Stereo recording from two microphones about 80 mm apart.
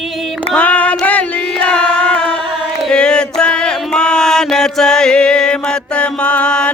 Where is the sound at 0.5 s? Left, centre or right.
Centre.